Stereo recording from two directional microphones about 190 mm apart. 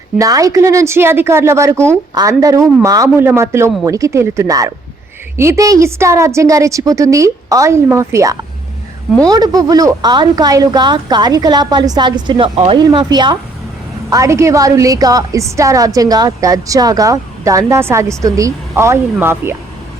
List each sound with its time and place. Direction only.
0.2 s a woman's voice: 20° right (ahead or behind)